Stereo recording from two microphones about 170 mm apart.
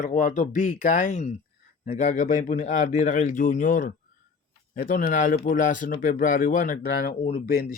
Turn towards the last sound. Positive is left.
turn(degrees=65)  # may be behind; listen again after turning